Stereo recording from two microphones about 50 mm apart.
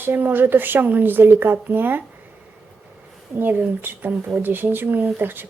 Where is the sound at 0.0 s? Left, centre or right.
Right.